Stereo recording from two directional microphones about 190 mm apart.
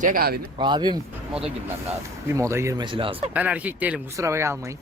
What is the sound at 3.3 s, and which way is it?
Speech, 10° right (ahead or behind).